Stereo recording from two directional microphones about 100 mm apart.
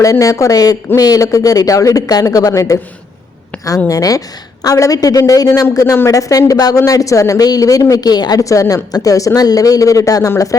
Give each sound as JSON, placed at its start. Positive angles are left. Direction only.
{"t": 0.0, "sound": "speech", "side_deg": 35}
{"t": 3.8, "sound": "speech", "side_deg": 35}